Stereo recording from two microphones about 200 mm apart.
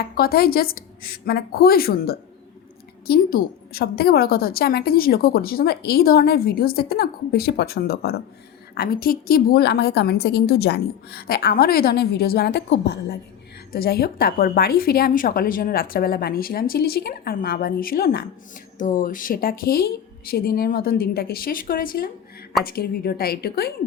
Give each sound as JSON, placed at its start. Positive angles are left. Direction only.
{"t": 0.2, "sound": "a woman's voice", "side_deg": 50}
{"t": 18.8, "sound": "a woman's voice", "side_deg": 40}